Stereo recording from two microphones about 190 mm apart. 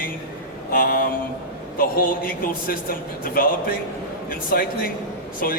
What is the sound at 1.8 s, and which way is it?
A man's voice, 50° left (ahead or behind).